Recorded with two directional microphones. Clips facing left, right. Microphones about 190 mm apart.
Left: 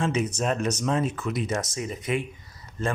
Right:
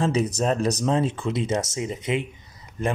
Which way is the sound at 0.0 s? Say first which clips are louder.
Right 3 dB; 35° right (ahead or behind).